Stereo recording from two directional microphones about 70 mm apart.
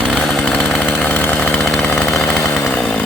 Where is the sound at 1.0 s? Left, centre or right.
Centre.